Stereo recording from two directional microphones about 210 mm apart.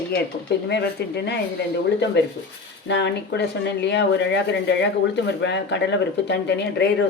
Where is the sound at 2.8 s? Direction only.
55° left (ahead or behind).